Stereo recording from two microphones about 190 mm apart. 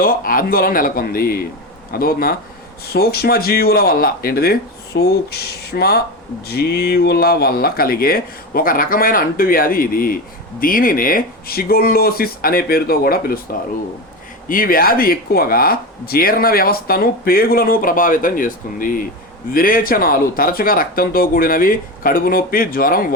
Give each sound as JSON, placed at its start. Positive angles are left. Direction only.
{"t": 0.0, "sound": "speech", "side_deg": 50}